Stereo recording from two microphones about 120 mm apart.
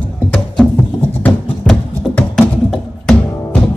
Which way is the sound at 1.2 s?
10° left (ahead or behind).